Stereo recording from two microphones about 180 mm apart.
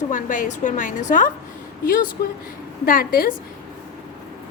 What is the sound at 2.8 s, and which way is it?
Speech, 55° left (ahead or behind).